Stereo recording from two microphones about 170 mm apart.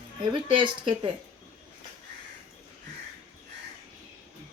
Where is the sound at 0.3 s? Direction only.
30° right (ahead or behind).